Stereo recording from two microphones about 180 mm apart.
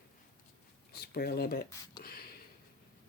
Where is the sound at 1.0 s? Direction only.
60° left (ahead or behind).